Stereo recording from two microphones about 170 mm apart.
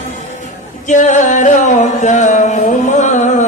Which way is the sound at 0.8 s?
45° left (ahead or behind).